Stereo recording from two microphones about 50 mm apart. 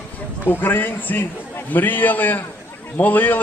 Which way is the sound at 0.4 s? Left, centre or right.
Left.